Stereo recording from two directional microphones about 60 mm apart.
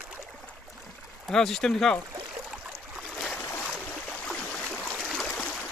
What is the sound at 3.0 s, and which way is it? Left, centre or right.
Boat, centre.